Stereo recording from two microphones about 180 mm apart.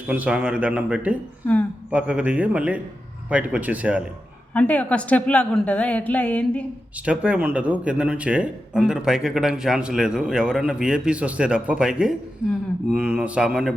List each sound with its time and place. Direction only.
0.1 s speech: 5° right (ahead or behind)
4.5 s a woman's voice: 10° left (ahead or behind)
6.9 s a man's voice: 5° right (ahead or behind)